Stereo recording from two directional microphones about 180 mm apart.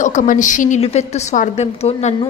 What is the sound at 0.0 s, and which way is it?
A woman's voice, 45° left (ahead or behind).